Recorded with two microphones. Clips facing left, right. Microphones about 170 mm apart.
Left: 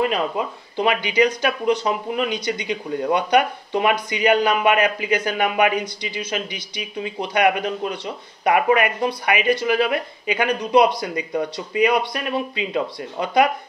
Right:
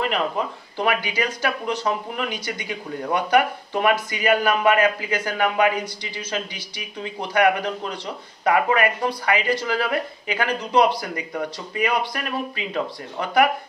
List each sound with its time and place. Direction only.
0.0 s speech: 20° left (ahead or behind)